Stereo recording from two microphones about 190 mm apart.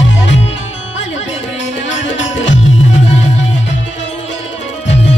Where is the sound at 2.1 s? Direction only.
75° left (ahead or behind).